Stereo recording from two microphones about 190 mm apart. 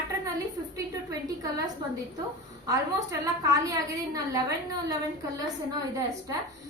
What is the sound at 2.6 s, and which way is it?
A woman's voice, 15° right (ahead or behind).